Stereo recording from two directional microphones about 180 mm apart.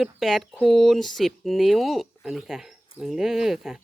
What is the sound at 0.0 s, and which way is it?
Speech, centre (ahead or behind).